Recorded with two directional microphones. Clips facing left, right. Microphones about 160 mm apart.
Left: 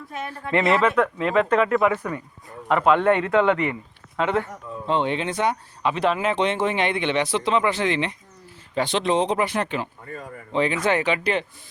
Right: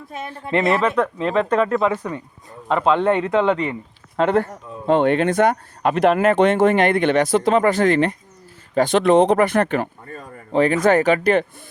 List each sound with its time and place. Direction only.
0.1 s speech: 25° right (ahead or behind)
1.0 s speech: 10° left (ahead or behind)
1.8 s speech: 25° right (ahead or behind)
4.2 s speech: 40° right (ahead or behind)